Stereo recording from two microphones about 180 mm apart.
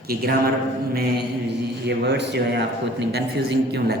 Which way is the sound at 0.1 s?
60° right (ahead or behind).